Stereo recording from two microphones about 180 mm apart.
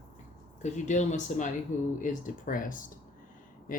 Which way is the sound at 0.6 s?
40° left (ahead or behind).